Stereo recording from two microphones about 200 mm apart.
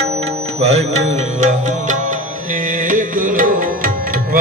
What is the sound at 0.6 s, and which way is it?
Music, 30° right (ahead or behind).